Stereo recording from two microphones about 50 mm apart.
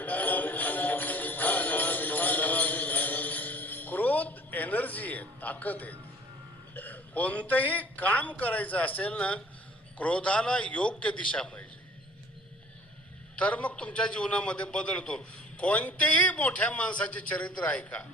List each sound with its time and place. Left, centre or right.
0.0 s jingle bell: left
6.7 s a man's voice: left
13.3 s a man's voice: left